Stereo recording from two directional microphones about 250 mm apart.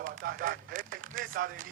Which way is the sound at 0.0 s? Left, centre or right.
Right.